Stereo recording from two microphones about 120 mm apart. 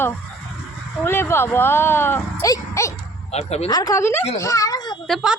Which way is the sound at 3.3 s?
65° left (ahead or behind).